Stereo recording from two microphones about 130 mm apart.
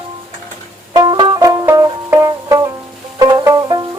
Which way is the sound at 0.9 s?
35° right (ahead or behind).